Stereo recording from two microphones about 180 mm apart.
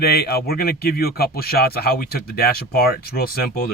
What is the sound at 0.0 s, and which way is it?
Speech, 60° left (ahead or behind).